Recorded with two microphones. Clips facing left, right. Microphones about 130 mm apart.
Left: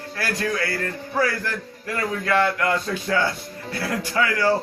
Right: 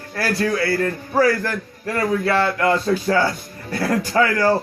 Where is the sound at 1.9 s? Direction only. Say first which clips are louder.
Right 3 dB; 30° right (ahead or behind).